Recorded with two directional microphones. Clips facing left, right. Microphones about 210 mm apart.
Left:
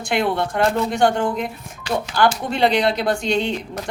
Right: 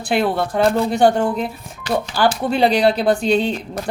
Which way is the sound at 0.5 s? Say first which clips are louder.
Right 3 dB; 35° right (ahead or behind).